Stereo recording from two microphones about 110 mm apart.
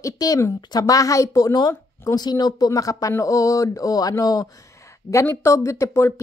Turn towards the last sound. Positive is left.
turn(degrees=25)  # may be behind; listen again after turning